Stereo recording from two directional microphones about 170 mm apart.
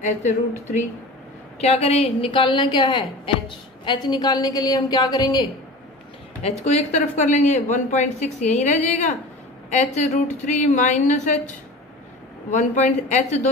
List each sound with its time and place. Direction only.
0.0 s speech: 45° left (ahead or behind)
1.6 s a woman's voice: 35° left (ahead or behind)
6.4 s speech: 40° left (ahead or behind)